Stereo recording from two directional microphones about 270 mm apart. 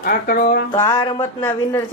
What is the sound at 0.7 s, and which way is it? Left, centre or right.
Speech, centre.